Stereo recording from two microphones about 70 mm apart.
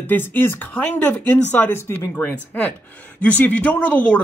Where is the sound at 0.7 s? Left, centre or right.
Left.